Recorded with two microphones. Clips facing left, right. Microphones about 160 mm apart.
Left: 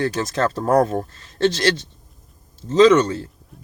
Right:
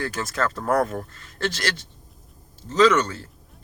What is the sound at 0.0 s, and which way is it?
Speech, 30° left (ahead or behind).